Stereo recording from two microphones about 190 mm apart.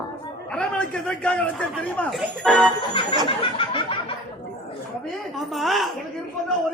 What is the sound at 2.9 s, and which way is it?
Speech, 25° left (ahead or behind).